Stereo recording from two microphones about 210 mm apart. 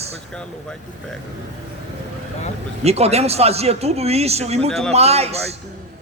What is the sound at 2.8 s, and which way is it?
A man's voice, 30° right (ahead or behind).